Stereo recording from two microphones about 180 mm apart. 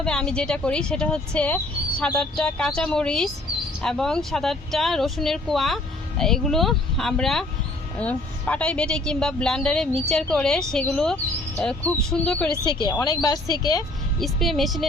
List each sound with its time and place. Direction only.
0.0 s speech: 5° left (ahead or behind)
12.6 s speech: 25° left (ahead or behind)
14.2 s speech: centre (ahead or behind)